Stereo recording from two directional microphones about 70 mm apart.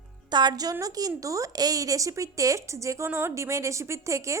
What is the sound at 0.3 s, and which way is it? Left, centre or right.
A woman's voice, right.